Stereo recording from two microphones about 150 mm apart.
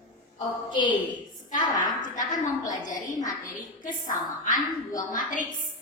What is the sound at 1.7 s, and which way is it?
A woman's voice, 60° left (ahead or behind).